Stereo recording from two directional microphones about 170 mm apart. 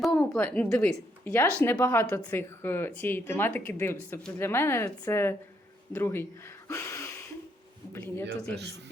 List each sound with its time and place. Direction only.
0.1 s a woman's voice: 10° left (ahead or behind)
6.7 s a sound: 15° left (ahead or behind)
7.9 s speech: 10° left (ahead or behind)